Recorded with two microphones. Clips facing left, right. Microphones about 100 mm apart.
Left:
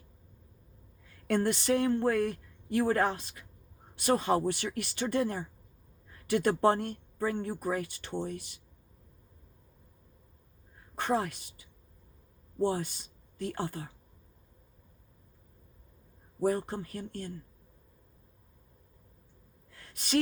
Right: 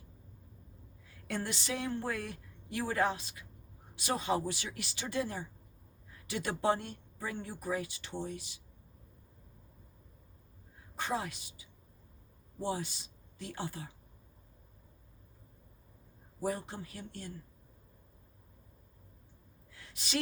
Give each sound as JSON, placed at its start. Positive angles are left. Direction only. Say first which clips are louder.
{"t": 1.3, "sound": "speech", "louder": "left 10 dB", "side_deg": 55}
{"t": 10.9, "sound": "a woman's voice", "louder": "left 6 dB", "side_deg": 55}
{"t": 12.6, "sound": "speech", "louder": "left 6 dB", "side_deg": 50}
{"t": 16.4, "sound": "speech", "louder": "left 7 dB", "side_deg": 50}
{"t": 19.7, "sound": "gasp", "louder": "left 7 dB", "side_deg": 50}